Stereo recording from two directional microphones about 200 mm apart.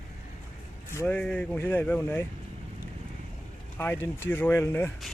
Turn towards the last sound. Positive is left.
turn(degrees=10)  # may be behind; listen again after turning